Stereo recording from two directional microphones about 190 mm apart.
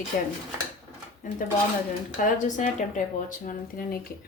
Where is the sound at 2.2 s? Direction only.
40° left (ahead or behind).